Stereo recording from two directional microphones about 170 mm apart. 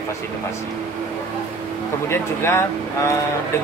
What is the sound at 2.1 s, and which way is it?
Speech, 15° left (ahead or behind).